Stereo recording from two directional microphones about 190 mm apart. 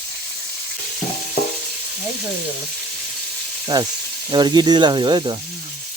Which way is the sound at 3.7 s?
20° right (ahead or behind).